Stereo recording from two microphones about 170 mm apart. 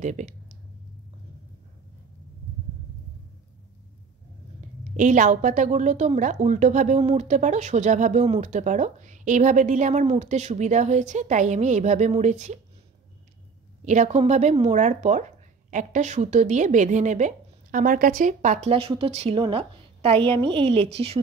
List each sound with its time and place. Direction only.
0.0 s a woman's voice: 45° right (ahead or behind)
4.9 s a woman's voice: 50° right (ahead or behind)
13.8 s a woman's voice: 45° right (ahead or behind)